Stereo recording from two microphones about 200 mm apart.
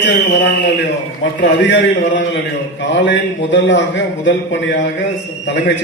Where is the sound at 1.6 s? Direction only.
65° left (ahead or behind).